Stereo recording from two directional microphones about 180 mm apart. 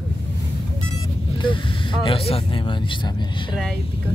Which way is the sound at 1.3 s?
25° left (ahead or behind).